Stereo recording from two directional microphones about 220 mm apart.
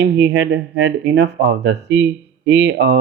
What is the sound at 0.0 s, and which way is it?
Speech, 50° right (ahead or behind).